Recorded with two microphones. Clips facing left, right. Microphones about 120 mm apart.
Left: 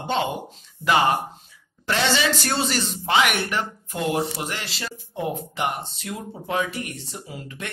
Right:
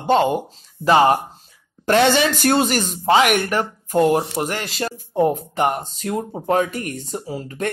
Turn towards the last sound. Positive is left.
turn(degrees=-40)  # may be behind; listen again after turning